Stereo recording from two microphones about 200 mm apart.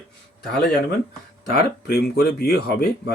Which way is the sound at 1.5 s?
50° left (ahead or behind).